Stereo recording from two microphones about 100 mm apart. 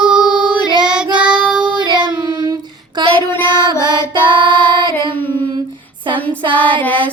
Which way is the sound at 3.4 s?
45° right (ahead or behind).